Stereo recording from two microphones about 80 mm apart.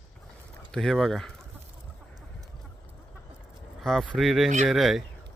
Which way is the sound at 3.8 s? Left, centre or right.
Centre.